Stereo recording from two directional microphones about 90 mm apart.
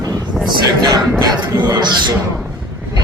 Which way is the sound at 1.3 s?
50° right (ahead or behind).